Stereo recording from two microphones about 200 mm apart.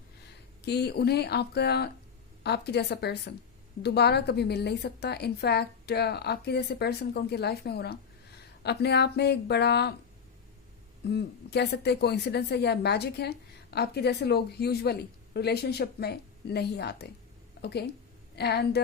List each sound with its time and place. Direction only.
0.6 s a woman's voice: 55° left (ahead or behind)
11.1 s a woman's voice: 55° left (ahead or behind)